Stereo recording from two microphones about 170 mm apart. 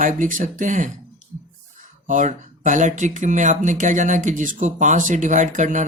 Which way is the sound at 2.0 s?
45° right (ahead or behind).